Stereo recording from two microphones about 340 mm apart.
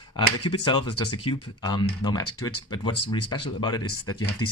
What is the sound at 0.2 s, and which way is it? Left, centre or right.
Speech, centre.